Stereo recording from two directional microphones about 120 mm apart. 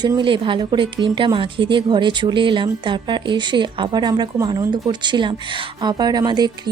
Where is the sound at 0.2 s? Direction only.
45° right (ahead or behind).